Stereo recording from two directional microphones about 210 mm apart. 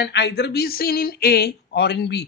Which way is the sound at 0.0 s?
55° left (ahead or behind).